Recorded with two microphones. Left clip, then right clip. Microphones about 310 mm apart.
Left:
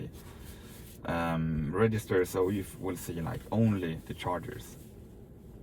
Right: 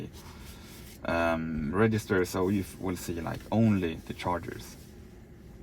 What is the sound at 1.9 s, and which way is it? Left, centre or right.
Speech, right.